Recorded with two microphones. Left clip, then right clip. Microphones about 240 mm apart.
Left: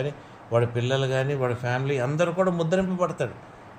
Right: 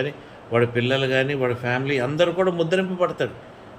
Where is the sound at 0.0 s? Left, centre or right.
Left.